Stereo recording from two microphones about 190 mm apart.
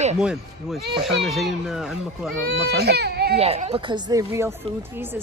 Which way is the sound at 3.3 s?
30° right (ahead or behind).